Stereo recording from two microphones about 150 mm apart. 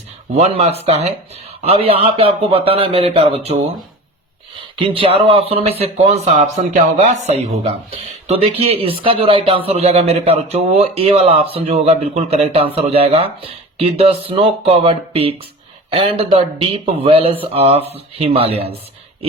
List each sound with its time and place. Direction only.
0.3 s speech: 45° right (ahead or behind)
4.8 s speech: 40° right (ahead or behind)